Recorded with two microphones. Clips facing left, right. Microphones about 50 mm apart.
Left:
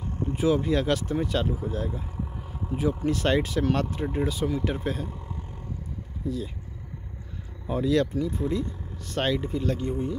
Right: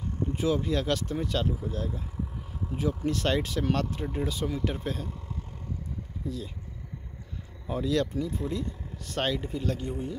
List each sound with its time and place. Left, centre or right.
0.4 s speech: centre
4.3 s speech: centre
6.2 s speech: centre
7.6 s speech: centre